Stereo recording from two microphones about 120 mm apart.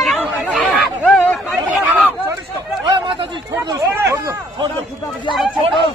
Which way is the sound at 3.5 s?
25° right (ahead or behind).